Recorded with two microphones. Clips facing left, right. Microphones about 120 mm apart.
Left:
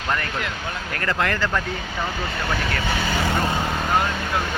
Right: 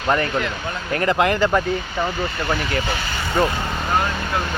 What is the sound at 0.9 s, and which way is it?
Speech, 20° right (ahead or behind).